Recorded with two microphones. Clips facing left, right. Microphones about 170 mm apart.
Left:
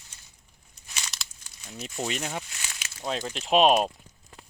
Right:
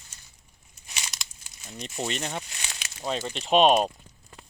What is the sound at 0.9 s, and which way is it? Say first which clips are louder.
Crumpling: right 1 dB; 20° right (ahead or behind).